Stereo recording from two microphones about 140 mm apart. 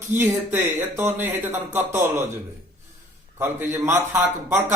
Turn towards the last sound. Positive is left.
turn(degrees=-15)  # may be behind; listen again after turning